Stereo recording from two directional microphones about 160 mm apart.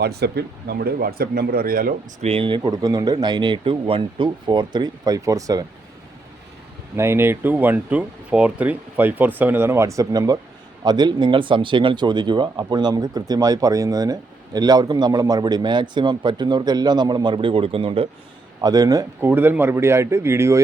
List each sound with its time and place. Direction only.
0.0 s speech: 90° right; by 2.0 s 65° right (ahead or behind)
2.2 s speech: 35° right (ahead or behind)
2.6 s speech: 25° right (ahead or behind)
6.9 s speech: 15° right (ahead or behind); by 18.1 s 35° right (ahead or behind)
18.6 s speech: 25° right (ahead or behind)